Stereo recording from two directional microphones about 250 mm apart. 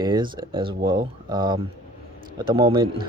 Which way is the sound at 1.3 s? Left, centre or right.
Centre.